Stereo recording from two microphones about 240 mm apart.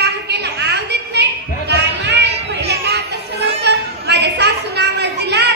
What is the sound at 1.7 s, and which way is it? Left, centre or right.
Children playing, right.